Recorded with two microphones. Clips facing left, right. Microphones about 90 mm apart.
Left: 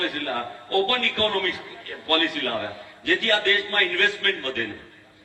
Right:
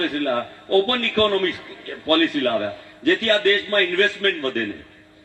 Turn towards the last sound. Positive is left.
turn(degrees=-35)  # may be behind; listen again after turning